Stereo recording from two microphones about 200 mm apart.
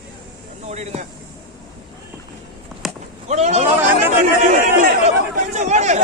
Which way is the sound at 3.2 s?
35° right (ahead or behind).